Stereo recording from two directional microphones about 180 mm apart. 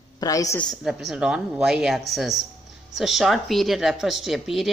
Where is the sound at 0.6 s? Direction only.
Centre (ahead or behind).